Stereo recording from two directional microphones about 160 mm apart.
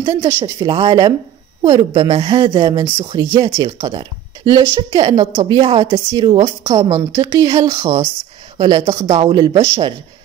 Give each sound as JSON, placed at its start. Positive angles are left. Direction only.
{"t": 0.0, "sound": "a woman's voice", "side_deg": -30}
{"t": 6.8, "sound": "speech", "side_deg": -20}